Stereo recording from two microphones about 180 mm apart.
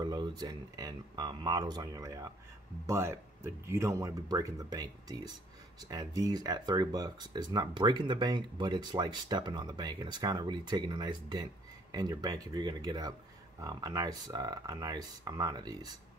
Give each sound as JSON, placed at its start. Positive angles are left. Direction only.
{"t": 0.0, "sound": "speech", "side_deg": -20}